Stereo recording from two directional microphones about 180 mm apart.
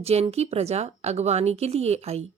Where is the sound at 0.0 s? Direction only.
35° right (ahead or behind).